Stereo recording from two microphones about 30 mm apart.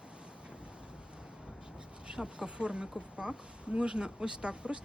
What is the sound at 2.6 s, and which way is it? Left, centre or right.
Speech, right.